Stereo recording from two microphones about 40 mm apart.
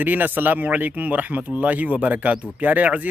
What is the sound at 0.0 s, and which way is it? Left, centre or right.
Speech, right.